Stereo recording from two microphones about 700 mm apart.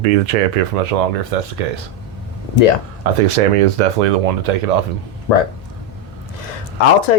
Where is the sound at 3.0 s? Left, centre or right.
Right.